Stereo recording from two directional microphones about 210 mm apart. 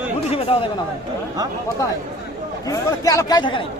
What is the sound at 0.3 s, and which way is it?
Speech, 25° left (ahead or behind).